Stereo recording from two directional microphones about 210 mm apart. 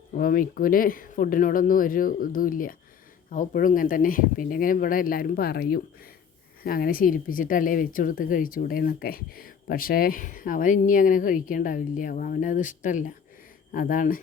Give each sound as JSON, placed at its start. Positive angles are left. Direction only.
{"t": 0.2, "sound": "speech", "side_deg": 40}